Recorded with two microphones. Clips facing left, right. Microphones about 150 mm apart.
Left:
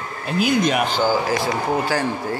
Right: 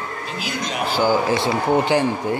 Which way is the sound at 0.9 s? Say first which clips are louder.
Right 1 dB; 15° right (ahead or behind).